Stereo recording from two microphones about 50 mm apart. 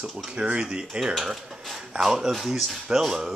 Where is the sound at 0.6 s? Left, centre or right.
Centre.